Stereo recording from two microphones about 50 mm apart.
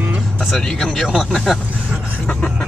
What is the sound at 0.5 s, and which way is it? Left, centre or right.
Speech, centre.